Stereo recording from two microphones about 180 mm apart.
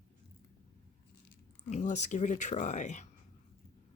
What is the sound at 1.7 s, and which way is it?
Speech, 40° left (ahead or behind).